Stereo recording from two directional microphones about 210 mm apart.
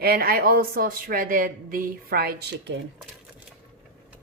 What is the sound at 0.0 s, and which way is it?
A woman's voice, 45° right (ahead or behind).